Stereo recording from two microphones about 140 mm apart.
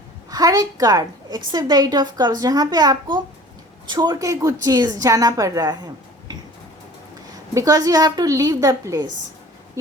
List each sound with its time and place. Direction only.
0.3 s a woman's voice: 25° right (ahead or behind)
7.5 s a woman's voice: 25° right (ahead or behind)